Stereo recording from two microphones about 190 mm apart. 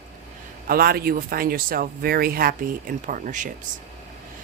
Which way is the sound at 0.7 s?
50° right (ahead or behind).